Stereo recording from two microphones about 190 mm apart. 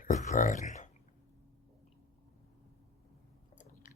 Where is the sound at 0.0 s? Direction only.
40° left (ahead or behind).